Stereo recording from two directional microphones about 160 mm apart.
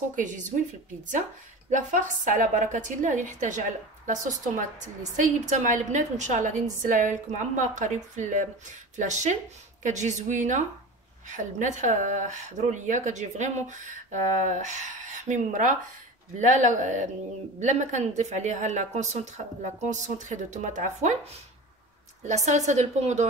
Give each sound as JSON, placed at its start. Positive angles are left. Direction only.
{"t": 0.1, "sound": "a woman's voice", "side_deg": -50}
{"t": 1.7, "sound": "a woman's voice", "side_deg": -50}
{"t": 22.2, "sound": "a woman's voice", "side_deg": -45}